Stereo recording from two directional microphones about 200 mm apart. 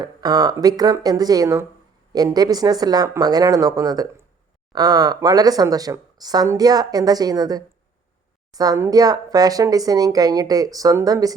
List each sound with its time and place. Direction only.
0.0 s speech: 20° right (ahead or behind)